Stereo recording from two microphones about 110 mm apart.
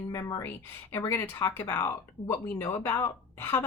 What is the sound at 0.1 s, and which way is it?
A woman's voice, 30° left (ahead or behind).